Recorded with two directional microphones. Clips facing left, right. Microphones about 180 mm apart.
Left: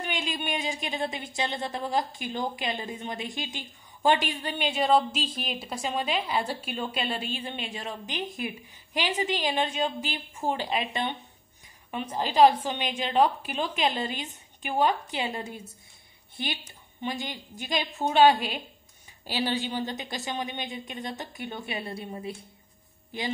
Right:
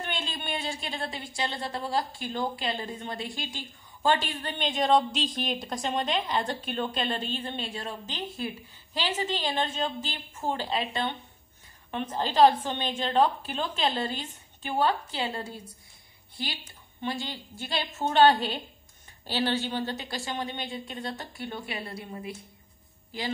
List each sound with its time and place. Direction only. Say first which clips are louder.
0.0 s a woman's voice: left 3 dB; 15° left (ahead or behind)
17.0 s a woman's voice: even; 20° left (ahead or behind)